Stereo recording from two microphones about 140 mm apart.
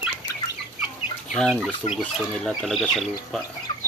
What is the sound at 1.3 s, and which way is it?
Speech, 5° left (ahead or behind).